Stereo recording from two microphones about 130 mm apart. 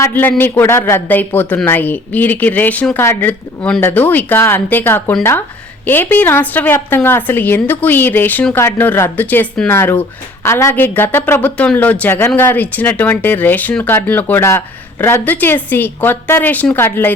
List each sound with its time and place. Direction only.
0.0 s a woman's voice: 15° left (ahead or behind)